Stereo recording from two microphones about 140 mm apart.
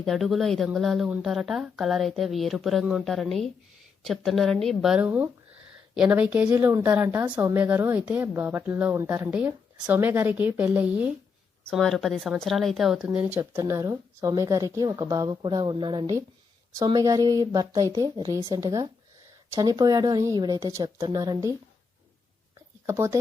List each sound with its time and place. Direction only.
0.0 s a woman's voice: centre (ahead or behind)
11.7 s a woman's voice: 5° left (ahead or behind)
13.3 s speech: 15° right (ahead or behind)
22.9 s speech: 20° right (ahead or behind)